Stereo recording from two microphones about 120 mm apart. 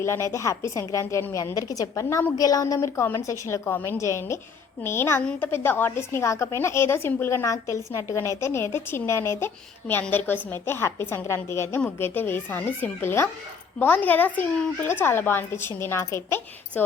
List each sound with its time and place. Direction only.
0.0 s a woman's voice: 25° left (ahead or behind)